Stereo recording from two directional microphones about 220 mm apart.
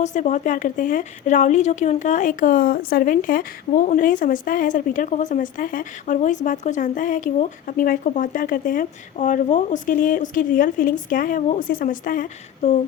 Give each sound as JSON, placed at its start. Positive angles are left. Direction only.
{"t": 0.0, "sound": "a woman's voice", "side_deg": 35}